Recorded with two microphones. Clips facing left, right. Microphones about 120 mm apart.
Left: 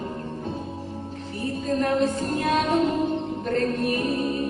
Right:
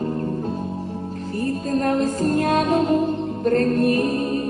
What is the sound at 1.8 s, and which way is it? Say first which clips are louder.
Music: right 2 dB; 40° right (ahead or behind).